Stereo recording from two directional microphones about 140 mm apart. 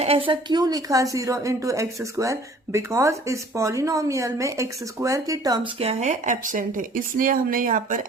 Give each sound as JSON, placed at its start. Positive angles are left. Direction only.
{"t": 0.0, "sound": "speech", "side_deg": -45}
{"t": 5.8, "sound": "speech", "side_deg": -50}